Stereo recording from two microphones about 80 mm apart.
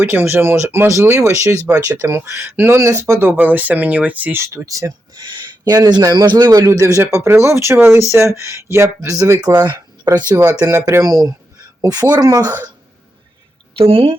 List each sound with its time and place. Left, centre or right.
0.0 s speech: right
1.6 s speech: right
2.0 s speech: right; by 4.4 s centre
4.4 s a man's voice: right
5.2 s a man's voice: right
9.6 s a sound: right
10.3 s a man's voice: right